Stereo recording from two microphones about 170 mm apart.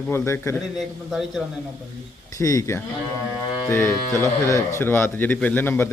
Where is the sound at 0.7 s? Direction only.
Centre (ahead or behind).